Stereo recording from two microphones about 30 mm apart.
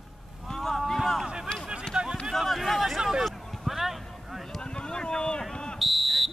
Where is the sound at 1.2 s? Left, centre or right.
Right.